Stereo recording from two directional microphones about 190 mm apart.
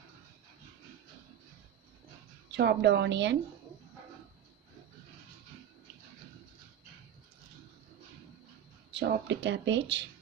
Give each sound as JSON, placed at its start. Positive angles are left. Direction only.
{"t": 2.6, "sound": "speech", "side_deg": -65}
{"t": 8.9, "sound": "speech", "side_deg": -70}